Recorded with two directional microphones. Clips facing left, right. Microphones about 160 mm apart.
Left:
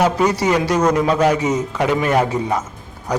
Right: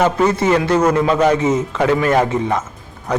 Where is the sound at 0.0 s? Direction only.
10° left (ahead or behind).